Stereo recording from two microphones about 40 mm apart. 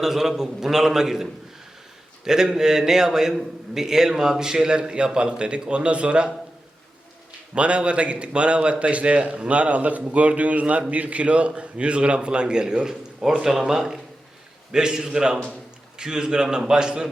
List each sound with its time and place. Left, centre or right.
0.0 s a man's voice: centre; by 6.3 s right
7.5 s a man's voice: right